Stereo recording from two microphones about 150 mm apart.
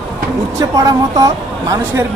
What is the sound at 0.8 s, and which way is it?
Speech, 25° right (ahead or behind).